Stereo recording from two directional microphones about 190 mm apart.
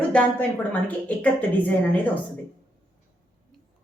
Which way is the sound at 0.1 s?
5° left (ahead or behind).